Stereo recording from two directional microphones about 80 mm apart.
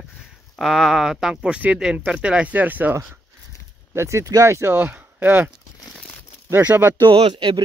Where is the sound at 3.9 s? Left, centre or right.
Right.